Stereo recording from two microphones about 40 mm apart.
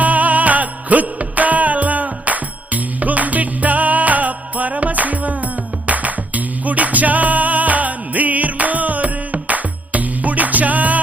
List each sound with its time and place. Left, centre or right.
0.0 s music: right